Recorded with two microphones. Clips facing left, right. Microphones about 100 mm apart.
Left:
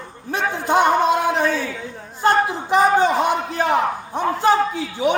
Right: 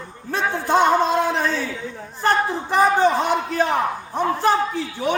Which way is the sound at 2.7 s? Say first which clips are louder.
Left 1 dB; 15° left (ahead or behind).